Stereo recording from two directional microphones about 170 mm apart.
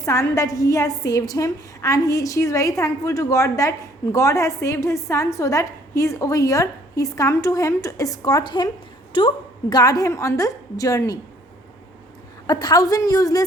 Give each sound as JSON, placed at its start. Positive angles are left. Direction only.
{"t": 0.0, "sound": "a woman's voice", "side_deg": 20}
{"t": 12.5, "sound": "a woman's voice", "side_deg": 25}